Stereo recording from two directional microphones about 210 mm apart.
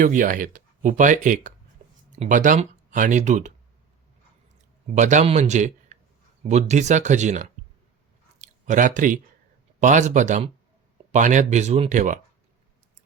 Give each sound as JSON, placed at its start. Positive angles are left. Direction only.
{"t": 0.0, "sound": "speech", "side_deg": -40}
{"t": 4.9, "sound": "speech", "side_deg": -35}